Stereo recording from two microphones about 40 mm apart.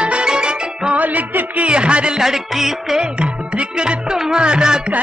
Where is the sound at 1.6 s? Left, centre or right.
Right.